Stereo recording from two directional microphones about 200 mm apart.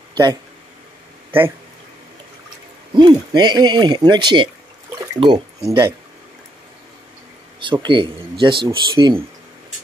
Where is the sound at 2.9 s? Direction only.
20° right (ahead or behind).